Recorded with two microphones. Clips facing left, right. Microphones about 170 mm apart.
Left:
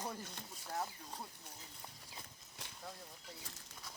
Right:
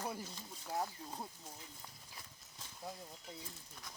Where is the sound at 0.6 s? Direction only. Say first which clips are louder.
Right 3 dB; 20° right (ahead or behind).